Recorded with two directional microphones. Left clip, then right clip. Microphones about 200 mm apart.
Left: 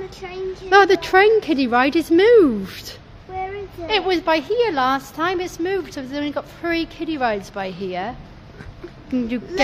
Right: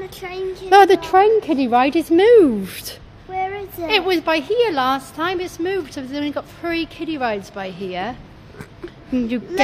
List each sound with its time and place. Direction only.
0.0 s a woman's voice: 50° right (ahead or behind)
0.7 s a woman's voice: 15° right (ahead or behind)
1.0 s a woman's voice: centre (ahead or behind)
2.7 s speech: 20° right (ahead or behind)
3.3 s a sound: 60° right (ahead or behind)
3.8 s a woman's voice: 15° right (ahead or behind); by 8.0 s 10° left (ahead or behind)